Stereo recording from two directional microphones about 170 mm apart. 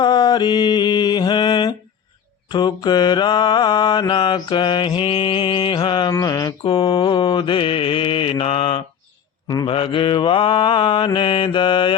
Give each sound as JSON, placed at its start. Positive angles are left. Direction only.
{"t": 0.0, "sound": "mantra", "side_deg": 25}